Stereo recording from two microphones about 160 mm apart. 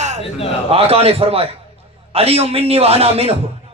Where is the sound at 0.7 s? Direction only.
40° right (ahead or behind).